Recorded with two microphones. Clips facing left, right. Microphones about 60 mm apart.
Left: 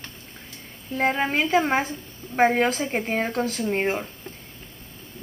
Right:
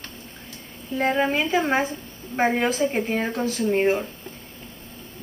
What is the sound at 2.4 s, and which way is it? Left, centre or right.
Speech, centre.